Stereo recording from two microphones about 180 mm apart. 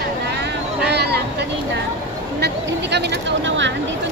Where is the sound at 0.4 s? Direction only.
65° right (ahead or behind).